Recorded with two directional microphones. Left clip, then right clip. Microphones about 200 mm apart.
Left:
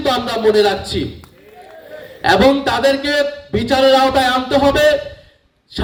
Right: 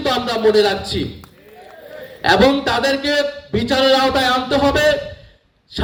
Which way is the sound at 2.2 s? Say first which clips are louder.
Left 2 dB; 20° left (ahead or behind).